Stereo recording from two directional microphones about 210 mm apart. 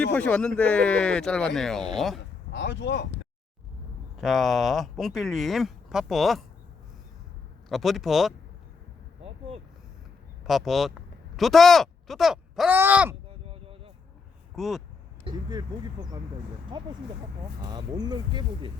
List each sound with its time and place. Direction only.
0.0 s speech: 5° left (ahead or behind)
2.5 s speech: 55° left (ahead or behind)
4.2 s speech: centre (ahead or behind)
7.7 s speech: centre (ahead or behind)
10.4 s speech: centre (ahead or behind)
13.4 s a sound: 25° right (ahead or behind)
14.5 s speech: centre (ahead or behind)
15.2 s speech: 20° right (ahead or behind)